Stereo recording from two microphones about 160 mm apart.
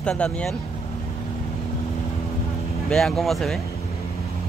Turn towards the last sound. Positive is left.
turn(degrees=0)  # may be behind; listen again after turning